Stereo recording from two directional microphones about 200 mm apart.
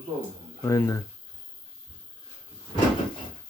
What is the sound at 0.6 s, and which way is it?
Speech, 15° left (ahead or behind).